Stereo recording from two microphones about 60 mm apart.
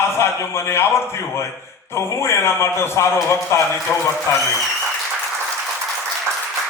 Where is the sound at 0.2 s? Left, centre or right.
Left.